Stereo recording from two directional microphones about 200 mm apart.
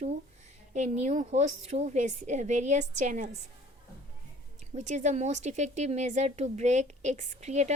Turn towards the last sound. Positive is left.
turn(degrees=-35)  # may be behind; listen again after turning